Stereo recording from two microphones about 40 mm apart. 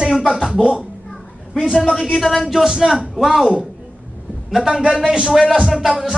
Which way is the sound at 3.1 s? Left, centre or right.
Centre.